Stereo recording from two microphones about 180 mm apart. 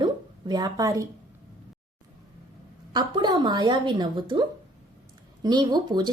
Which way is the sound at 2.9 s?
25° right (ahead or behind).